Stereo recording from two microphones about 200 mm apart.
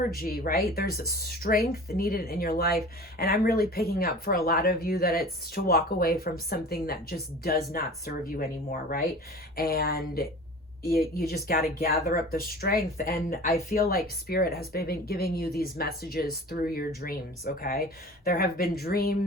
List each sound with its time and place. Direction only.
0.2 s speech: 45° left (ahead or behind)